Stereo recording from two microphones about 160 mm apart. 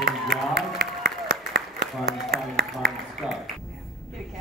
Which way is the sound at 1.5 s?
80° right.